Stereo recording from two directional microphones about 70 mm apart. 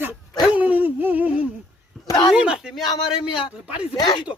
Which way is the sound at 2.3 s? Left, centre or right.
Centre.